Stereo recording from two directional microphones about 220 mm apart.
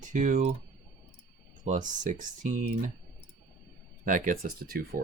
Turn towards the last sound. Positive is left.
turn(degrees=-40)  # may be behind; listen again after turning